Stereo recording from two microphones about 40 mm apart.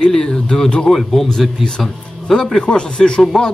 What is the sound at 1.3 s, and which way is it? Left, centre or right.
A man's voice, centre.